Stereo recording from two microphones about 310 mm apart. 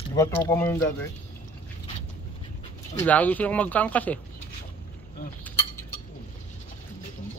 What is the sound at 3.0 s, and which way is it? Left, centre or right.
Speech, centre.